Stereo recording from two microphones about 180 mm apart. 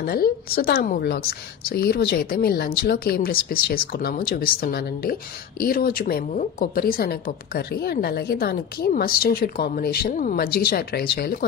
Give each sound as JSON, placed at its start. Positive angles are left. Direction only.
{"t": 0.0, "sound": "a woman's voice", "side_deg": 55}